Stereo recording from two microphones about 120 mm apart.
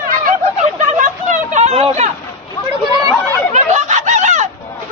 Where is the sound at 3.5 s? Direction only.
80° right.